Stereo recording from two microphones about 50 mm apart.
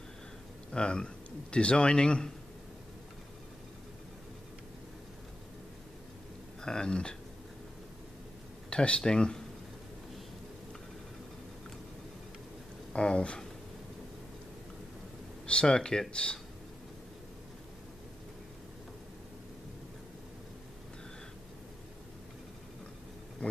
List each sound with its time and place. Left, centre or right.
0.7 s a man's voice: centre
6.6 s speech: centre
8.6 s speech: centre
12.9 s a man's voice: centre
15.4 s speech: centre
23.4 s speech: left